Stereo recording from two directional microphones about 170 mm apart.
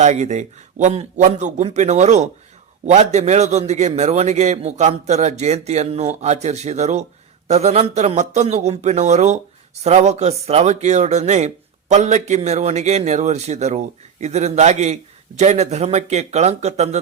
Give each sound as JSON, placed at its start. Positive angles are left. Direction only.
{"t": 0.0, "sound": "a man's voice", "side_deg": -45}